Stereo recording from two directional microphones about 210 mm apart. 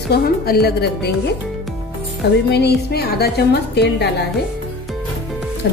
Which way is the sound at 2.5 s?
50° left (ahead or behind).